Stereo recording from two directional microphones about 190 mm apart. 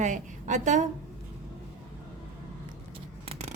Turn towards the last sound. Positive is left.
turn(degrees=-35)  # may be behind; listen again after turning